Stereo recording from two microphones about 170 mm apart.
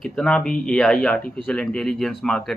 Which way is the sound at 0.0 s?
5° left (ahead or behind).